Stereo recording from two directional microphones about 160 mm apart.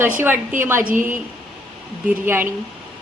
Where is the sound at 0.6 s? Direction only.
15° right (ahead or behind).